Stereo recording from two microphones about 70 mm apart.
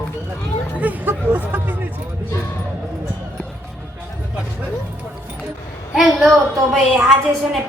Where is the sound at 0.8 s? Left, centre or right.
Right.